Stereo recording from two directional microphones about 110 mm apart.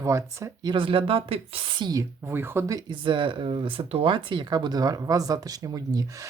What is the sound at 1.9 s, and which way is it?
Speech, 25° right (ahead or behind).